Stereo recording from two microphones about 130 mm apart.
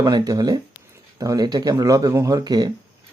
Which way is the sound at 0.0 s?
30° right (ahead or behind).